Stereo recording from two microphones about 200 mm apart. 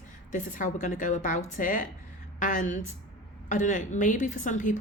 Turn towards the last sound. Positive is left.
turn(degrees=40)  # may be behind; listen again after turning